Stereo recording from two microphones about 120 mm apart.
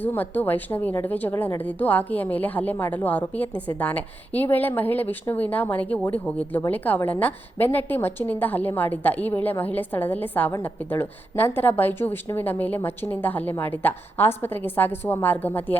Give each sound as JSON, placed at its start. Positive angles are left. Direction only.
{"t": 0.0, "sound": "a woman's voice", "side_deg": 15}